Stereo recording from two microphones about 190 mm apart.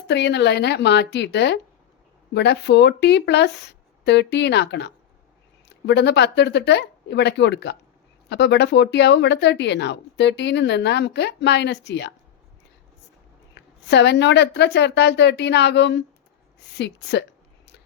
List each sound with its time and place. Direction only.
0.1 s speech: 65° left (ahead or behind)
13.5 s speech: 65° left (ahead or behind)